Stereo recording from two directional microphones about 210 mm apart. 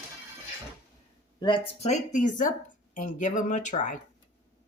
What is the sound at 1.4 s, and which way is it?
Speech, 25° left (ahead or behind).